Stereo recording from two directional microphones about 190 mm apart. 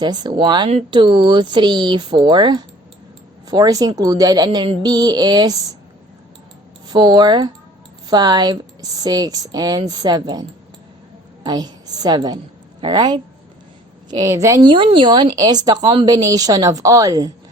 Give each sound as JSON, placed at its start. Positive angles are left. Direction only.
{"t": 0.0, "sound": "speech", "side_deg": -20}
{"t": 6.8, "sound": "speech", "side_deg": -20}
{"t": 11.4, "sound": "a woman's voice", "side_deg": -20}